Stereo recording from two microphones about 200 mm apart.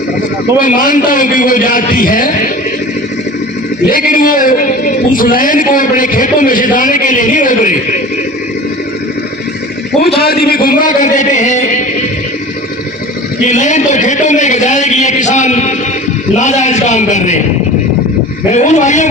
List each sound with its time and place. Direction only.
0.6 s a man's voice: 40° left (ahead or behind)
3.8 s a man's voice: 45° left (ahead or behind)
10.2 s a man's voice: 50° left (ahead or behind)
13.5 s a man's voice: 35° left (ahead or behind)
18.5 s a man's voice: 35° left (ahead or behind)